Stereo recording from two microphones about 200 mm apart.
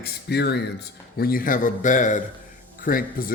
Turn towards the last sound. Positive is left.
turn(degrees=45)  # may be behind; listen again after turning